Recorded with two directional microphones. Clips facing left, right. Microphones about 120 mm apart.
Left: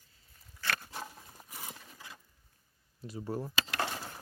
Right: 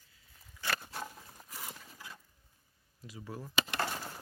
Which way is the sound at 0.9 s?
15° left (ahead or behind).